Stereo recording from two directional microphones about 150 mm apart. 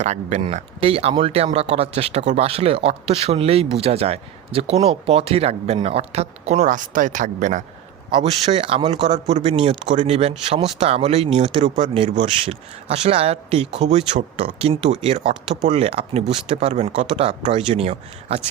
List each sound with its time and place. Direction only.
0.0 s speech: 50° right (ahead or behind)
0.4 s speech: 40° right (ahead or behind); by 7.6 s 55° right (ahead or behind)
8.1 s speech: 45° right (ahead or behind)
9.9 s speech: 50° right (ahead or behind)